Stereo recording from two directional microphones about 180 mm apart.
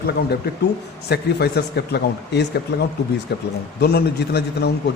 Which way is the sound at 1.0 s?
65° left (ahead or behind).